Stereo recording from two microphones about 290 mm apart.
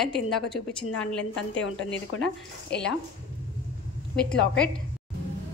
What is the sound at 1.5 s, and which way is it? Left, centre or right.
Speech, left.